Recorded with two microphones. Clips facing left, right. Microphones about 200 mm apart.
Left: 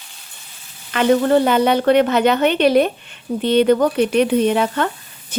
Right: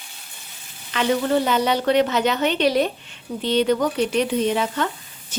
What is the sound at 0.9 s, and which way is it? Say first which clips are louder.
A woman's voice: left 6 dB; 55° left (ahead or behind).